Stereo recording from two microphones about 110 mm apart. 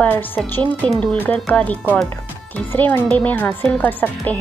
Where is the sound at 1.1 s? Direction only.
15° left (ahead or behind).